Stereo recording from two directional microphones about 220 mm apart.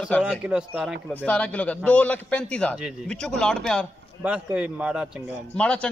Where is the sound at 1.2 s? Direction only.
5° left (ahead or behind).